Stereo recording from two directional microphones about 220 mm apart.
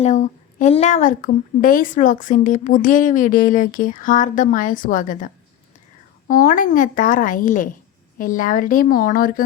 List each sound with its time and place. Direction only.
0.0 s a woman's voice: 35° left (ahead or behind)